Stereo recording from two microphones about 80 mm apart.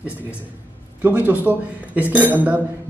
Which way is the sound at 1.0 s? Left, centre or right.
Right.